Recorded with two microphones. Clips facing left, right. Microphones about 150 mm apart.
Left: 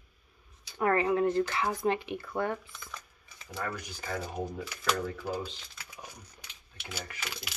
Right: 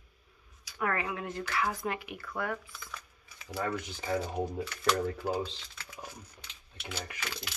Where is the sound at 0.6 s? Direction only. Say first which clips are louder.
Left 6 dB; 30° left (ahead or behind).